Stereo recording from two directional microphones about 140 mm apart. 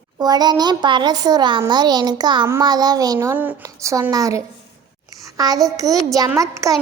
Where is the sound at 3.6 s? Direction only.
25° right (ahead or behind).